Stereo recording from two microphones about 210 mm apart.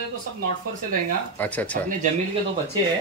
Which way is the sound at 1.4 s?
5° left (ahead or behind).